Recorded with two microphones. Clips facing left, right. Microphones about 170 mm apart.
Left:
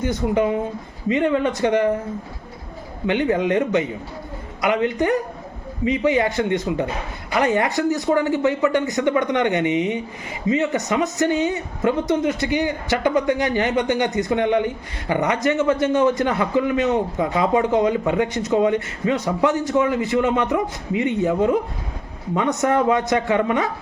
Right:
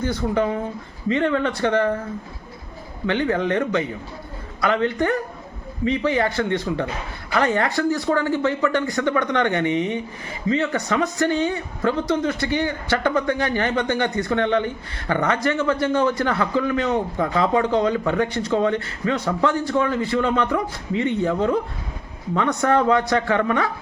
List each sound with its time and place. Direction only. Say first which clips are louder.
0.0 s a man's voice: left 2 dB; 20° left (ahead or behind)
3.1 s a man's voice: left 2 dB; 15° left (ahead or behind)